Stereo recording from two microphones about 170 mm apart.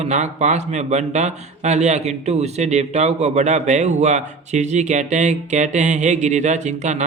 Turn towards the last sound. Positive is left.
turn(degrees=-45)  # may be behind; listen again after turning